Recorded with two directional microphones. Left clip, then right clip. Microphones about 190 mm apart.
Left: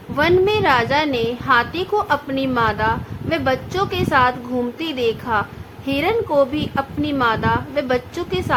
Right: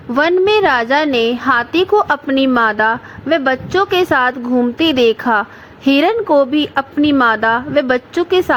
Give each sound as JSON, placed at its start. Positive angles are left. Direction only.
{"t": 0.1, "sound": "a woman's voice", "side_deg": -40}